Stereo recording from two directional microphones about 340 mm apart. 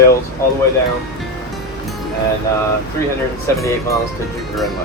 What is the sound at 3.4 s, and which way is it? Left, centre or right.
Speech, centre.